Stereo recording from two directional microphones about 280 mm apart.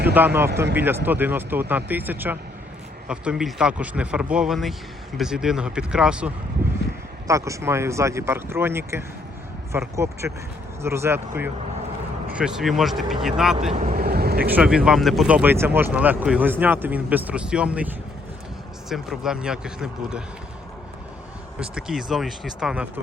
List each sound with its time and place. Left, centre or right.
0.3 s speech: centre
13.7 s speech: right
14.4 s speech: centre
21.6 s speech: centre